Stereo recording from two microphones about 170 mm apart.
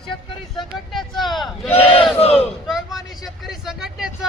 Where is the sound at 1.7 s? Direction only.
35° left (ahead or behind).